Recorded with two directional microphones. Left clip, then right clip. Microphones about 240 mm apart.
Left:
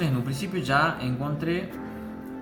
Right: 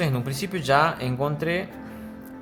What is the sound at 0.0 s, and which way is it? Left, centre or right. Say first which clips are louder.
Speech: right 3 dB; right.